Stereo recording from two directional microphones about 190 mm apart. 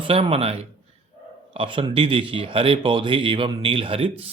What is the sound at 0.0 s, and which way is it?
Speech, 30° right (ahead or behind).